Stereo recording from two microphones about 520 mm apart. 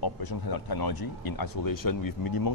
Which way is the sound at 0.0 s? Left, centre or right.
Left.